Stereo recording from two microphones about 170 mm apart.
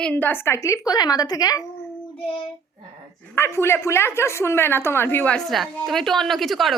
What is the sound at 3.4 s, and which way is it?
A woman's voice, 15° left (ahead or behind).